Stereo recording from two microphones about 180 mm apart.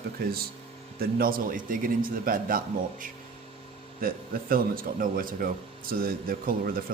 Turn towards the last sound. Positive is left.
turn(degrees=-55)  # may be behind; listen again after turning